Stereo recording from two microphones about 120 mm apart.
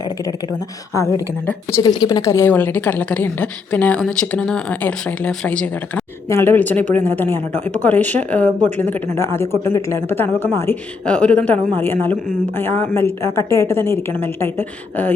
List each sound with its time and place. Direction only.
0.9 s a woman's voice: 25° left (ahead or behind)
6.2 s a woman's voice: 20° left (ahead or behind)